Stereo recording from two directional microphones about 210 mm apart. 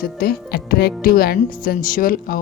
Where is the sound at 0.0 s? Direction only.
45° left (ahead or behind).